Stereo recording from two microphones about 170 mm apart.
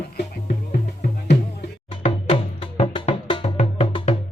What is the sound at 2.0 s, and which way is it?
Music, 30° left (ahead or behind).